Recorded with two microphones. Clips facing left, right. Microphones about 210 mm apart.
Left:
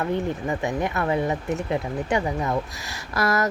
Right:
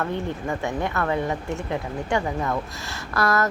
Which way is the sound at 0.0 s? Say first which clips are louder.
Left 2 dB; 15° left (ahead or behind).